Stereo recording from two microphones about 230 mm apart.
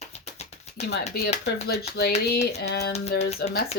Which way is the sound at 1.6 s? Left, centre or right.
Left.